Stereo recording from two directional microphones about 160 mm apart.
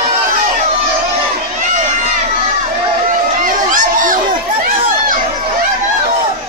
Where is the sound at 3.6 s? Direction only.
55° right (ahead or behind).